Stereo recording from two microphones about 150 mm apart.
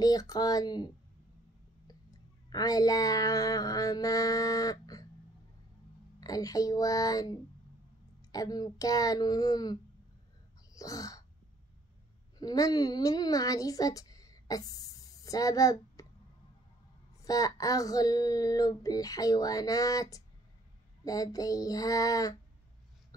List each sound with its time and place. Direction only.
0.0 s child singing: 25° left (ahead or behind)
1.9 s speech: 25° left (ahead or behind)
6.2 s child singing: 25° left (ahead or behind)
10.7 s sneeze: 25° left (ahead or behind)
12.4 s a woman's voice: 25° left (ahead or behind)
17.2 s child singing: 25° left (ahead or behind)